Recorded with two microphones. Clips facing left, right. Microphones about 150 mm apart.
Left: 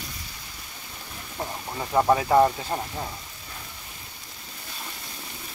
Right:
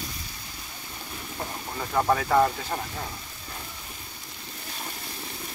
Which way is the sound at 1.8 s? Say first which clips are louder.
Left 3 dB; 20° left (ahead or behind).